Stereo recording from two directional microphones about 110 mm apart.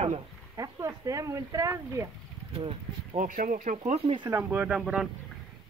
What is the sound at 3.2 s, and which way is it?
Speech, 90° right.